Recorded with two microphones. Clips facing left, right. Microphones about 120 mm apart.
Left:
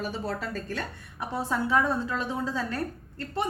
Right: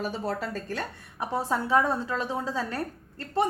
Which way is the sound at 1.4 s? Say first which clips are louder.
Right 1 dB; 35° right (ahead or behind).